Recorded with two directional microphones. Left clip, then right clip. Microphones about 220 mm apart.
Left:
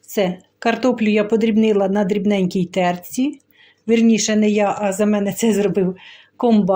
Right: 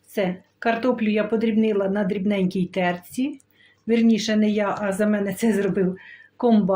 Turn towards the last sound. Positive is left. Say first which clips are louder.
# left 3 dB
turn(degrees=25)  # may be behind; listen again after turning